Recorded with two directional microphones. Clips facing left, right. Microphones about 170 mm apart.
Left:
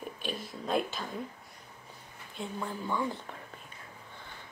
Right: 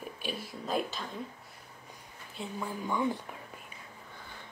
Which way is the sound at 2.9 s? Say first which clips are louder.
Right 3 dB; 15° right (ahead or behind).